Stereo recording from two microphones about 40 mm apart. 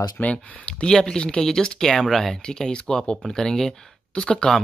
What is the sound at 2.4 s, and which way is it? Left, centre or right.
Speech, centre.